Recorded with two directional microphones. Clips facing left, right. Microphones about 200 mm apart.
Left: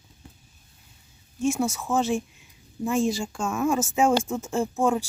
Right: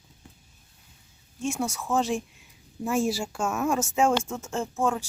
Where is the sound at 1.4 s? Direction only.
5° left (ahead or behind).